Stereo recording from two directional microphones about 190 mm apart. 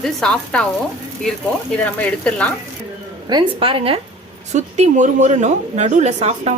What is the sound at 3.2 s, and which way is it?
Speech, 25° right (ahead or behind).